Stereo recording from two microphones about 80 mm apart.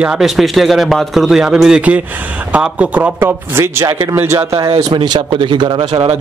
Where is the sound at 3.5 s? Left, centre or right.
Right.